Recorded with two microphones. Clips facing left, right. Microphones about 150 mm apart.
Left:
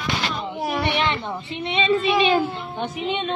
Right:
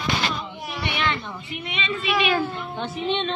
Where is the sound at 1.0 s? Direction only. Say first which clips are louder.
Left 3 dB; 20° left (ahead or behind).